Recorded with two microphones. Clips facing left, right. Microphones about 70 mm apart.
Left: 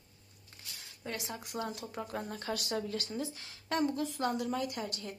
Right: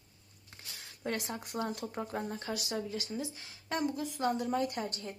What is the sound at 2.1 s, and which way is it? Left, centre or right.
A woman's voice, right.